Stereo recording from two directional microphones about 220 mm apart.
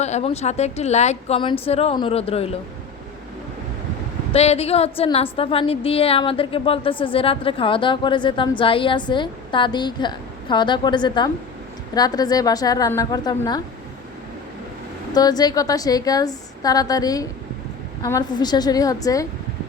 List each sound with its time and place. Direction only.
0.0 s a woman's voice: 30° left (ahead or behind)
4.3 s a woman's voice: 30° left (ahead or behind)
15.1 s a woman's voice: 15° left (ahead or behind)